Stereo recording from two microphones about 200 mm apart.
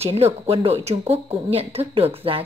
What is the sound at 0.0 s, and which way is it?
A woman's voice, 30° right (ahead or behind).